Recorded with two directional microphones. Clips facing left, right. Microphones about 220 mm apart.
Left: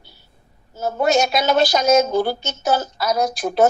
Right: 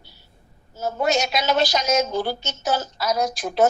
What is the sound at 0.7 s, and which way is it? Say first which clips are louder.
A woman's voice: left 4 dB; 55° left (ahead or behind).